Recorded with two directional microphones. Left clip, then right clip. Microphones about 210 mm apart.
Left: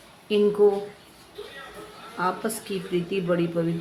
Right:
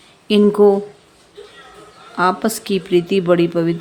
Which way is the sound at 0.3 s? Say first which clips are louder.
Right 7 dB; 55° right (ahead or behind).